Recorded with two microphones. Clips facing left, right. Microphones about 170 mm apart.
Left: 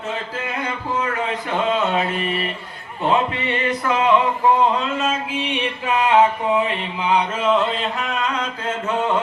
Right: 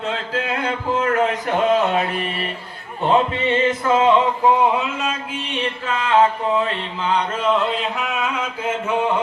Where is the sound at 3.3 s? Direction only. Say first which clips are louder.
Right 4 dB; 25° right (ahead or behind).